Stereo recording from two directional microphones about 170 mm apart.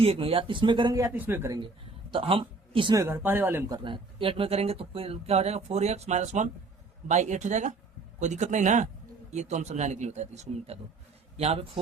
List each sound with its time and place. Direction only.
0.0 s speech: 35° right (ahead or behind); by 3.8 s 15° right (ahead or behind)
3.8 s a man's voice: 30° right (ahead or behind)